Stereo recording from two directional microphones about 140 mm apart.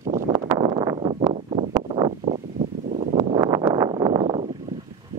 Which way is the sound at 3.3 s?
25° right (ahead or behind).